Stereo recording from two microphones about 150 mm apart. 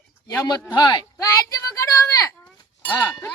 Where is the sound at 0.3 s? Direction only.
25° left (ahead or behind).